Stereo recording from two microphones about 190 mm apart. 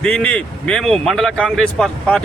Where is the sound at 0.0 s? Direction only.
5° left (ahead or behind).